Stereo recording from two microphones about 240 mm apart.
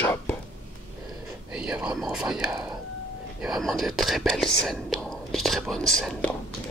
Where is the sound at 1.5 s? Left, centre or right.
Centre.